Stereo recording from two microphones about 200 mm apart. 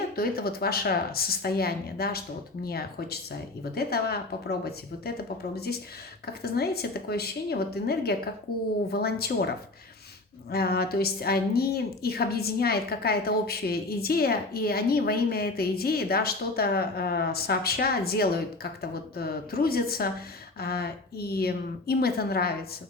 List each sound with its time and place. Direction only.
0.2 s a woman's voice: 50° left (ahead or behind)
10.5 s a woman's voice: 50° left (ahead or behind)